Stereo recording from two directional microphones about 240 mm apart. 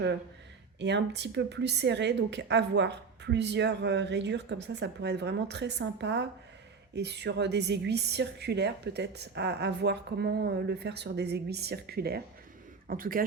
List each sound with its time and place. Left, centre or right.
0.8 s a woman's voice: right